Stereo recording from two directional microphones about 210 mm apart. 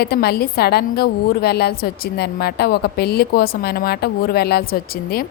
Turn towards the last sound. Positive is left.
turn(degrees=45)  # may be behind; listen again after turning